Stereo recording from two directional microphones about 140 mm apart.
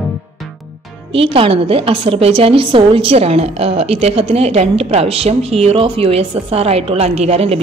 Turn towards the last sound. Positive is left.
turn(degrees=-45)  # may be behind; listen again after turning